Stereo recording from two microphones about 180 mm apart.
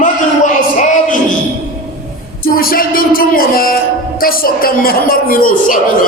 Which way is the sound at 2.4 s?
55° left (ahead or behind).